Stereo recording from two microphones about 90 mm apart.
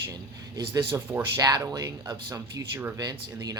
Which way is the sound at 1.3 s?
45° right (ahead or behind).